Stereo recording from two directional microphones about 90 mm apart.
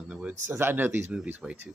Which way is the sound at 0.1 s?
15° right (ahead or behind).